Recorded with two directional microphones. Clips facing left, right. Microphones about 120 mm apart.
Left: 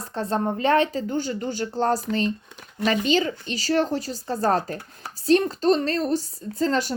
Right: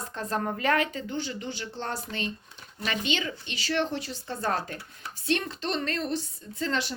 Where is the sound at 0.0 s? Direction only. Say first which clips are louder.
Left 5 dB; 30° left (ahead or behind).